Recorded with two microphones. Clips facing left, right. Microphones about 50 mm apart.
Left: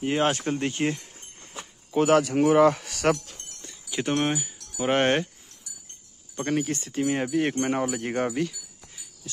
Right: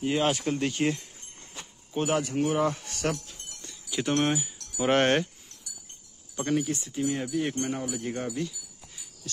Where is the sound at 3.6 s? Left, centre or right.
Left.